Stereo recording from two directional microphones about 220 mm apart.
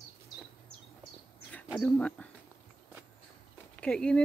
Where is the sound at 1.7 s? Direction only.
5° left (ahead or behind).